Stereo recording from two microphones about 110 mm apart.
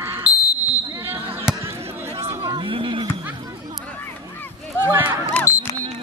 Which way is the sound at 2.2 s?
40° right (ahead or behind).